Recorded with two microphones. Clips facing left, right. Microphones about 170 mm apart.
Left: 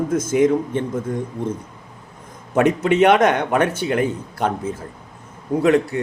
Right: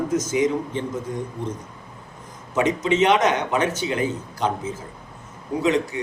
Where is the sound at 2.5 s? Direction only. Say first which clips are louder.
Left 4 dB; 60° left (ahead or behind).